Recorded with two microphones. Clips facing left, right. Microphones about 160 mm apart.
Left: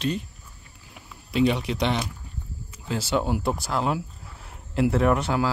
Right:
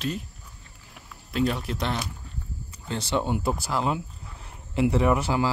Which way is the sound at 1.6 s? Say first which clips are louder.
Left 4 dB; 70° left (ahead or behind).